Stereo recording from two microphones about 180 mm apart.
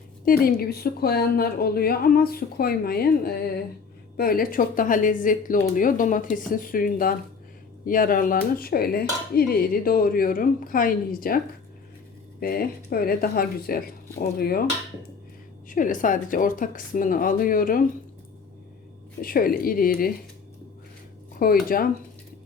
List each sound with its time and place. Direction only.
0.3 s speech: 60° left (ahead or behind)
12.4 s speech: 55° left (ahead or behind)
15.7 s speech: 45° left (ahead or behind)
19.2 s speech: 55° left (ahead or behind)
21.3 s speech: 55° left (ahead or behind)